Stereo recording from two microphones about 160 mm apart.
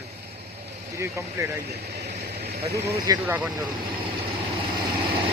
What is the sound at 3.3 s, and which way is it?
Speech, 10° right (ahead or behind).